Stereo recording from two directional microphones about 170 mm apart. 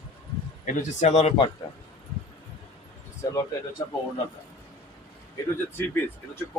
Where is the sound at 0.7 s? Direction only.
40° left (ahead or behind).